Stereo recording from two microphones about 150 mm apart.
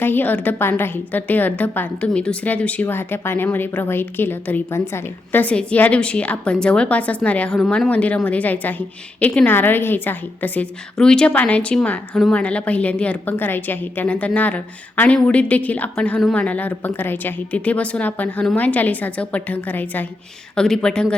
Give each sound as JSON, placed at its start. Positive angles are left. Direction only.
{"t": 0.0, "sound": "a woman's voice", "side_deg": 15}